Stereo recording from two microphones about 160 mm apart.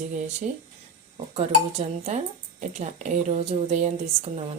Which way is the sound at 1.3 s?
40° right (ahead or behind).